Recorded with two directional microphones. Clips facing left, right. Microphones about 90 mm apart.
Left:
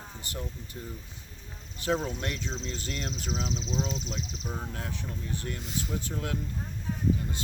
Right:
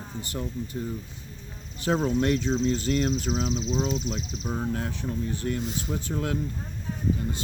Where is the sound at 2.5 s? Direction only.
55° right (ahead or behind).